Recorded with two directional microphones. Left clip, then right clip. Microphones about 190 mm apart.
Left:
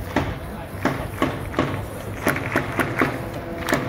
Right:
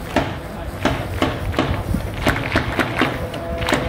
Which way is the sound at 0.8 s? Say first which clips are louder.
Right 3 dB; 45° right (ahead or behind).